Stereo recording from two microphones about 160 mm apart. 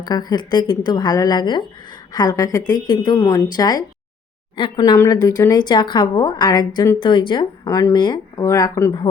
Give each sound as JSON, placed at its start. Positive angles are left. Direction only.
{"t": 0.0, "sound": "a woman's voice", "side_deg": 25}